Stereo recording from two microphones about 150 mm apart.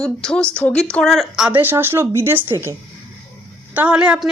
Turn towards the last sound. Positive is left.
turn(degrees=-5)  # may be behind; listen again after turning